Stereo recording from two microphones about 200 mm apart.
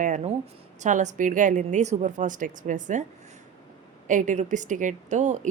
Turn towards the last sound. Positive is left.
turn(degrees=-35)  # may be behind; listen again after turning